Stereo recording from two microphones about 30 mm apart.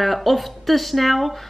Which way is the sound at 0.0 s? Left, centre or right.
Centre.